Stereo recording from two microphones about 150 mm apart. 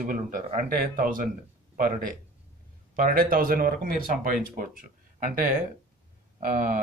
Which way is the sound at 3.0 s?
70° right (ahead or behind).